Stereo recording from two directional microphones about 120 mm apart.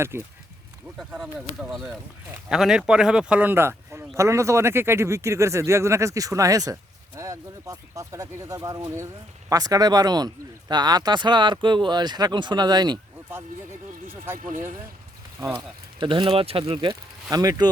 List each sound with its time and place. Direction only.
0.1 s speech: 20° right (ahead or behind)
1.1 s speech: 5° right (ahead or behind); by 13.0 s 35° right (ahead or behind)
14.3 s speech: 90° right
15.5 s speech: 45° right (ahead or behind)
17.2 s speech: 30° right (ahead or behind)